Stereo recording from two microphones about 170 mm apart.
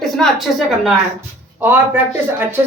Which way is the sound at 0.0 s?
Centre (ahead or behind).